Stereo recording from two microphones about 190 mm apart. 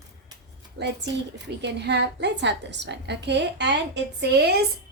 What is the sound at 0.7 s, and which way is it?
A woman's voice, 65° right (ahead or behind).